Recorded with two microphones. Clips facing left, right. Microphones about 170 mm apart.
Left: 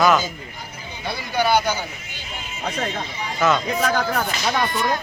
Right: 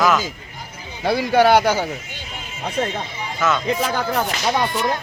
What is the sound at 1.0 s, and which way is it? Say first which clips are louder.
Speech: right 7 dB; 90° right.